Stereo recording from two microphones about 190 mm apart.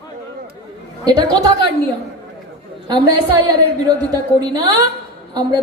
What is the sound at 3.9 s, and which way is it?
Speech, 20° right (ahead or behind).